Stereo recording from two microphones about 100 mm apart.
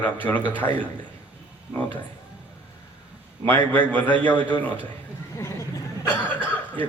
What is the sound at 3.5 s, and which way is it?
Speech, 15° left (ahead or behind).